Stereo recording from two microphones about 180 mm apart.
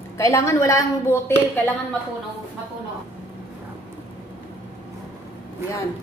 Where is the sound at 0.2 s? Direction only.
15° left (ahead or behind).